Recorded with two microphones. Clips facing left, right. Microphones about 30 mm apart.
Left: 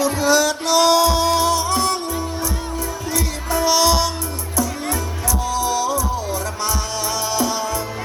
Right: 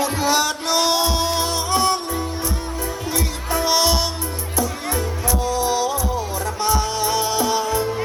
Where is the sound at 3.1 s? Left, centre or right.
Right.